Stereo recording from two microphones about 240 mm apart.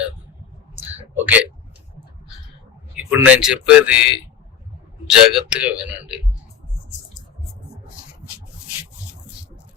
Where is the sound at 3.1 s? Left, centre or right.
Centre.